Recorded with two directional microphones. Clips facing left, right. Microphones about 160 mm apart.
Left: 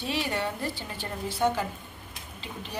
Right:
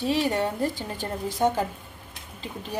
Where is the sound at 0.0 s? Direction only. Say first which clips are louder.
Right 6 dB; 40° right (ahead or behind).